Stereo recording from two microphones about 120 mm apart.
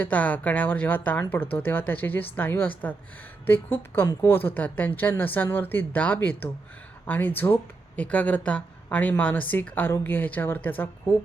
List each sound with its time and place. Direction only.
0.0 s speech: 15° left (ahead or behind)